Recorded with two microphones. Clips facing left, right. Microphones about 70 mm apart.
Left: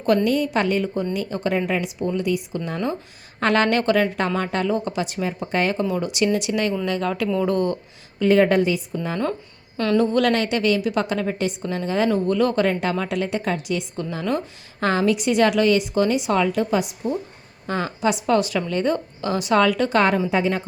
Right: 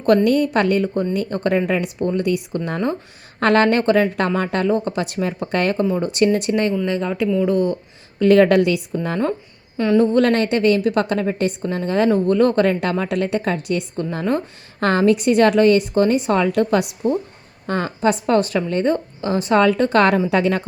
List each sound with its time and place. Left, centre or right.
0.3 s a woman's voice: right
2.6 s a woman's voice: right
6.8 s speech: right
7.4 s speech: centre
8.2 s a woman's voice: right
9.7 s a woman's voice: centre
10.0 s a woman's voice: right
20.3 s a woman's voice: right